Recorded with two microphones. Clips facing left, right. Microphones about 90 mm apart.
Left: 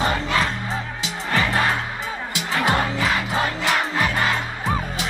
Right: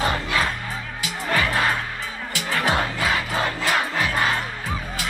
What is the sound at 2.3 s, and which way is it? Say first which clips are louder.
Music: left 1 dB; 20° left (ahead or behind).